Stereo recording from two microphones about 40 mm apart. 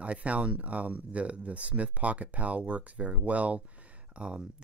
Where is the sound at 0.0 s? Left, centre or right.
Right.